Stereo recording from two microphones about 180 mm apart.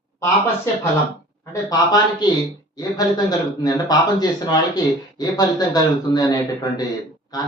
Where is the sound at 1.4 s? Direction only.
20° left (ahead or behind).